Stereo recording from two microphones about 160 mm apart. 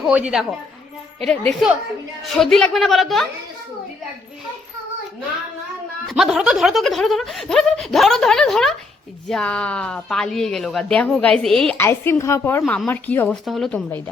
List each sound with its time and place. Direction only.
0.0 s speech: 5° right (ahead or behind)
1.6 s speech: centre (ahead or behind)
6.1 s speech: centre (ahead or behind)
11.8 s speech: 15° left (ahead or behind)
12.6 s speech: 5° left (ahead or behind)